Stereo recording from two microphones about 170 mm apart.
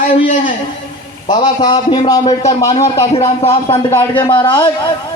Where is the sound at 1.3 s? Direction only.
25° left (ahead or behind).